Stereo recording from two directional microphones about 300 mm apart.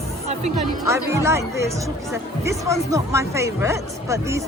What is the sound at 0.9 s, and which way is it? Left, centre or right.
Speech, centre.